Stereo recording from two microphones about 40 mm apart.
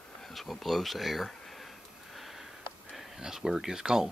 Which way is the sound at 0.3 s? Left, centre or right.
Centre.